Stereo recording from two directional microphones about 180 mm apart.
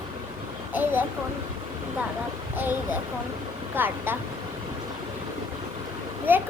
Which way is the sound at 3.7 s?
10° right (ahead or behind).